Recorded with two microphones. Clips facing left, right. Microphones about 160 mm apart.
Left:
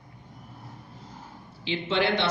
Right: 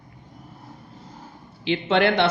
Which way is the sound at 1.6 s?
60° right (ahead or behind).